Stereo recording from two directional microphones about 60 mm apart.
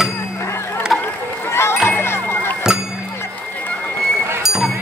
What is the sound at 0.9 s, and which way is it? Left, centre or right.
Run, centre.